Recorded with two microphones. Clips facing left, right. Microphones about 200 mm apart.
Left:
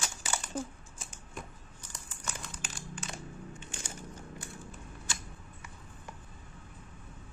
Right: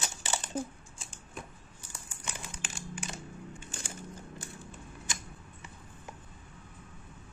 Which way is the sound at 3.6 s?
40° right (ahead or behind).